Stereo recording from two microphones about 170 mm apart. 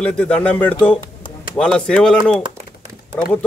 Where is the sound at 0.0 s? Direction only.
5° left (ahead or behind).